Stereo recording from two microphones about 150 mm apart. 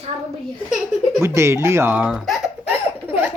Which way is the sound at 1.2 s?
20° right (ahead or behind).